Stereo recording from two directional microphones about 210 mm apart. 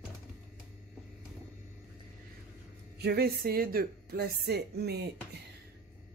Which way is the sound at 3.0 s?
50° right (ahead or behind).